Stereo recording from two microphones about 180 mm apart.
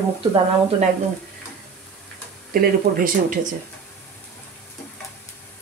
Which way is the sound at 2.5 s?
55° right (ahead or behind).